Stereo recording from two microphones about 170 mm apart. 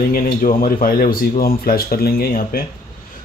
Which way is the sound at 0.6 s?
55° left (ahead or behind).